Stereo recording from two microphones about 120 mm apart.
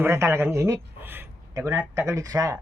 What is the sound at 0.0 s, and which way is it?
A man's voice, 20° right (ahead or behind).